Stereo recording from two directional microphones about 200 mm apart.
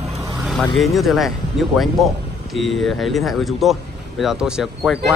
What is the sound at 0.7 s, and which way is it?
Speech, centre (ahead or behind).